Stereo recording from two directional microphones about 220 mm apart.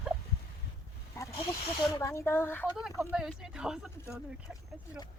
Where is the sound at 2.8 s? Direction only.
5° right (ahead or behind).